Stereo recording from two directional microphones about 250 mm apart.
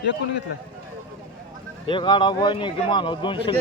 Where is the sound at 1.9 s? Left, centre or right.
Centre.